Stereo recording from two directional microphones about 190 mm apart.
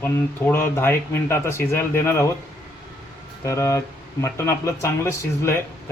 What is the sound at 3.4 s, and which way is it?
Speech, 15° left (ahead or behind).